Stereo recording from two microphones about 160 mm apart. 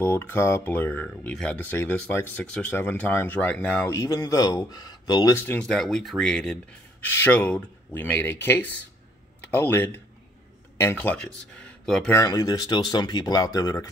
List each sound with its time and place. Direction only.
0.0 s speech: 15° left (ahead or behind)
3.9 s speech: 20° left (ahead or behind)
5.4 s speech: 10° left (ahead or behind)
12.1 s speech: 20° left (ahead or behind)